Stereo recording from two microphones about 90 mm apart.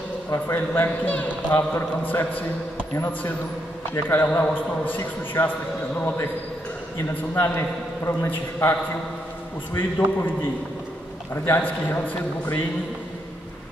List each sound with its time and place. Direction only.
0.5 s a man's voice: 20° left (ahead or behind)
7.4 s a man's voice: 35° left (ahead or behind)
9.8 s a man's voice: 20° left (ahead or behind)
11.4 s a man's voice: 25° left (ahead or behind)